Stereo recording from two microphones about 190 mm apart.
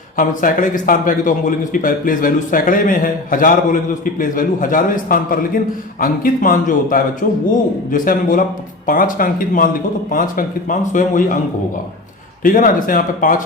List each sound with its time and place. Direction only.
0.2 s speech: 45° left (ahead or behind)
12.4 s speech: 45° left (ahead or behind)